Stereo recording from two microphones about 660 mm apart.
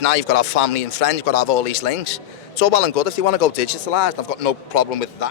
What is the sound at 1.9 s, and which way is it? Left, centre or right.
A man's voice, left.